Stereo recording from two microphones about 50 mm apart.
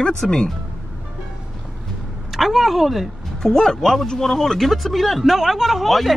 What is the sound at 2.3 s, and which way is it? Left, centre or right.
Speech, centre.